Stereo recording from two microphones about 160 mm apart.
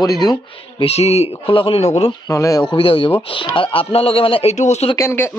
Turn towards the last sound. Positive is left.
turn(degrees=15)  # may be behind; listen again after turning